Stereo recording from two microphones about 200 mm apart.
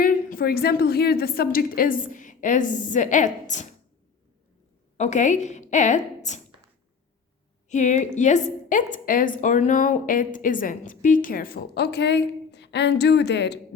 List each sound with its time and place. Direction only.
0.0 s a woman's voice: 45° left (ahead or behind)
4.9 s a woman's voice: 35° left (ahead or behind)
7.7 s a woman's voice: 35° left (ahead or behind); by 13.6 s 60° left (ahead or behind)